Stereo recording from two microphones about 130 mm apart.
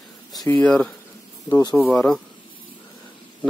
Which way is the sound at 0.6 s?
10° left (ahead or behind).